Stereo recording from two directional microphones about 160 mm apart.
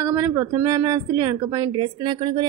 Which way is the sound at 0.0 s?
15° right (ahead or behind).